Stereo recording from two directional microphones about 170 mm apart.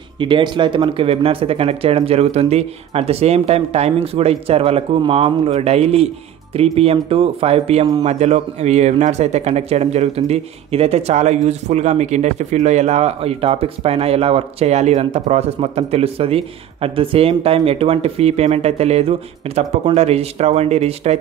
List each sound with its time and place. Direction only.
0.2 s speech: 30° right (ahead or behind)